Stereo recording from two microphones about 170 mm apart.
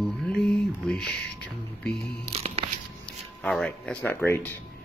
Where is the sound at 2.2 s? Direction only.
35° right (ahead or behind).